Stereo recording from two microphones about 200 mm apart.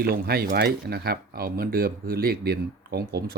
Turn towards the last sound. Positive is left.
turn(degrees=-55)  # may be behind; listen again after turning